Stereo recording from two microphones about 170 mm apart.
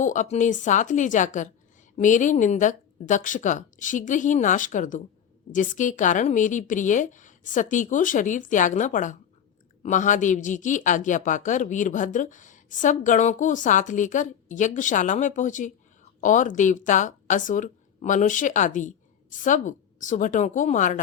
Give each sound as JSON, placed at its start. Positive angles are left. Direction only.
{"t": 0.0, "sound": "a woman's voice", "side_deg": 50}